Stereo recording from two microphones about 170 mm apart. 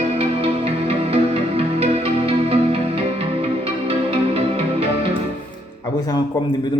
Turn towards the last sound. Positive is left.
turn(degrees=-35)  # may be behind; listen again after turning